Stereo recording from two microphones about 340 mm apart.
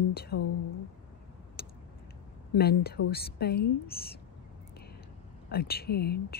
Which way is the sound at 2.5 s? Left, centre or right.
Left.